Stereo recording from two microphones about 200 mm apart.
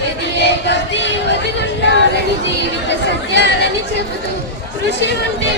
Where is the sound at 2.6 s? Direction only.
60° left (ahead or behind).